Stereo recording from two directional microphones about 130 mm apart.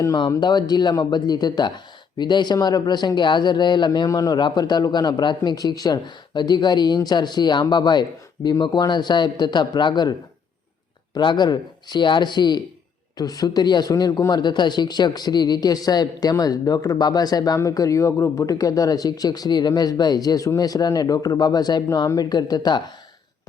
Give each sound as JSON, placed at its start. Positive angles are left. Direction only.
{"t": 0.0, "sound": "speech", "side_deg": 30}